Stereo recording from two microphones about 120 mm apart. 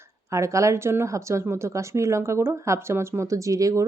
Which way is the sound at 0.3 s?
25° right (ahead or behind).